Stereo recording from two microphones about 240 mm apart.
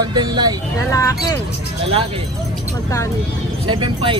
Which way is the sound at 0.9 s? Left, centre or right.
Centre.